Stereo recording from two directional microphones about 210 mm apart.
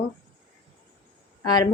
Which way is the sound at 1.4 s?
20° left (ahead or behind).